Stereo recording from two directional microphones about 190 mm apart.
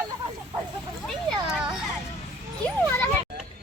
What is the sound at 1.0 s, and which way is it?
Speech, 5° left (ahead or behind).